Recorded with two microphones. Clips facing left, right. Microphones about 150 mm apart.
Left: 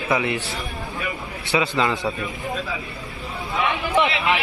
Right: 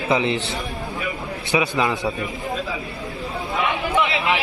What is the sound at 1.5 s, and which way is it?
Speech, 15° right (ahead or behind).